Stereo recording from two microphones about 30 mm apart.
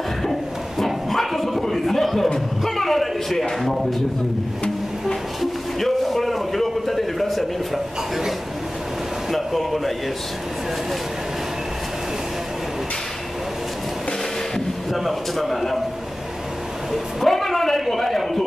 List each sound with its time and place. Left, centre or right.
0.2 s a sound: centre
2.6 s a man's voice: centre
5.8 s a man's voice: centre
9.3 s a man's voice: centre
14.9 s a man's voice: centre
16.9 s a man's voice: centre